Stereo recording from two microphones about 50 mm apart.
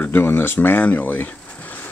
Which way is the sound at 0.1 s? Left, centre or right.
Left.